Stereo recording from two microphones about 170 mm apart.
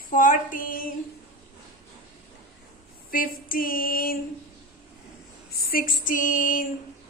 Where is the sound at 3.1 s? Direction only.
55° left (ahead or behind).